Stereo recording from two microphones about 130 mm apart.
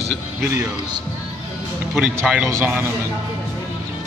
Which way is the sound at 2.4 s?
20° right (ahead or behind).